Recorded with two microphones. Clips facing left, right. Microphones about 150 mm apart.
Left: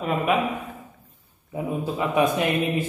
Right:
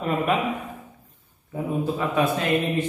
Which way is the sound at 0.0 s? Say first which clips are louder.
Left 1 dB; centre (ahead or behind).